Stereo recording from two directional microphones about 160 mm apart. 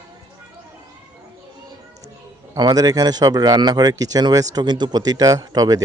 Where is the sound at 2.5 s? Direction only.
25° right (ahead or behind).